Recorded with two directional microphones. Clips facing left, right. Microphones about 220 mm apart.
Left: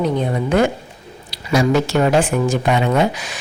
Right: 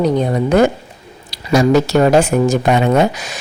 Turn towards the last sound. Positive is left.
turn(degrees=-45)  # may be behind; listen again after turning